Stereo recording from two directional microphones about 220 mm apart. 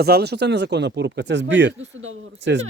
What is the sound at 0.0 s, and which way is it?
Speech, 50° right (ahead or behind).